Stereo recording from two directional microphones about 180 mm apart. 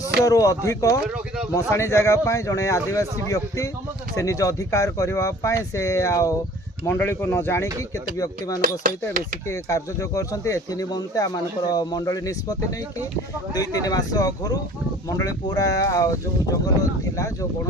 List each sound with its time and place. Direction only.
0.3 s speech: 20° left (ahead or behind)
9.5 s speech: 15° left (ahead or behind)